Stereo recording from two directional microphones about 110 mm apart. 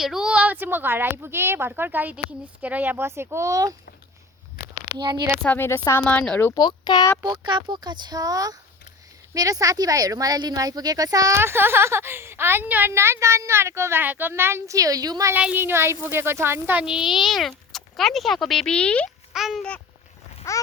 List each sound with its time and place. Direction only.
0.0 s a woman's voice: 5° right (ahead or behind); by 3.8 s 30° right (ahead or behind)
4.9 s speech: 40° right (ahead or behind)
5.4 s speech: 20° left (ahead or behind)
6.5 s speech: 40° left (ahead or behind)
7.3 s speech: 45° right (ahead or behind)
11.3 s a woman's voice: 20° right (ahead or behind)
15.4 s a woman's voice: 15° right (ahead or behind)
16.8 s speech: 5° right (ahead or behind)
19.3 s a sound: 5° right (ahead or behind)
20.4 s babbling: 25° left (ahead or behind)